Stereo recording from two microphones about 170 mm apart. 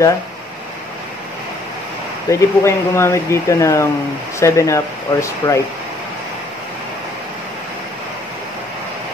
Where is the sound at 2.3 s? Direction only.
15° left (ahead or behind).